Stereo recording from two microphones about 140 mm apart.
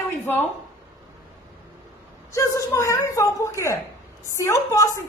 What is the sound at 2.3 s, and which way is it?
A woman's voice, 20° left (ahead or behind).